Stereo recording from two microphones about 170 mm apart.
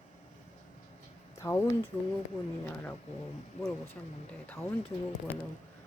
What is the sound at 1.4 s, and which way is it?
Speech, 15° left (ahead or behind).